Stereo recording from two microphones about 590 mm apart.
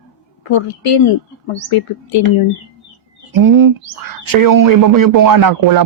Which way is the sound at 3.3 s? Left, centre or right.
Right.